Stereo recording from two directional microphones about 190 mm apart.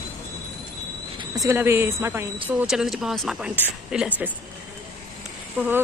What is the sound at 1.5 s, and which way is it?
Speech, 15° right (ahead or behind).